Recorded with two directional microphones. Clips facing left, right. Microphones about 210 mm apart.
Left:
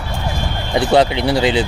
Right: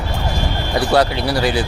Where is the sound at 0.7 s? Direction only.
20° left (ahead or behind).